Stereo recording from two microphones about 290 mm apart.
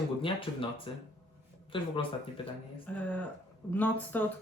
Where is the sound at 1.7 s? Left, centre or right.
Centre.